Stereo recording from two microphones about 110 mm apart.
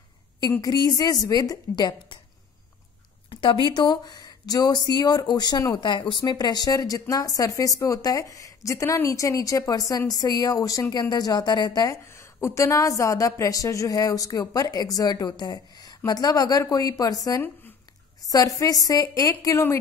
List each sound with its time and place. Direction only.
0.6 s speech: 35° left (ahead or behind)
3.3 s speech: 50° left (ahead or behind); by 19.8 s 25° left (ahead or behind)